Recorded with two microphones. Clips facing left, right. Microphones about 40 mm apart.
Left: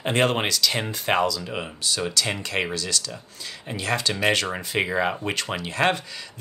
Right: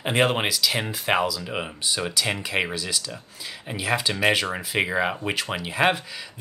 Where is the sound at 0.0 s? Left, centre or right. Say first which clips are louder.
Even; centre.